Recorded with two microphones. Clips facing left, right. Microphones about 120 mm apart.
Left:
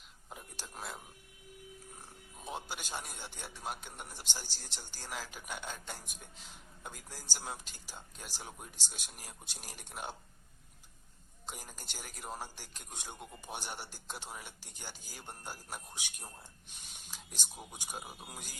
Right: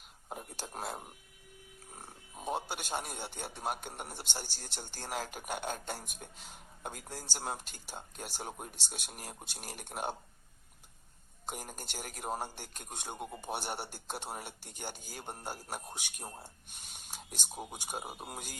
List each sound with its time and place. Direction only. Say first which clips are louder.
0.3 s a sound: right 6 dB; 50° right (ahead or behind)
2.0 s a man's voice: right 4 dB; 55° right (ahead or behind)
11.4 s a man's voice: right 5 dB; 55° right (ahead or behind)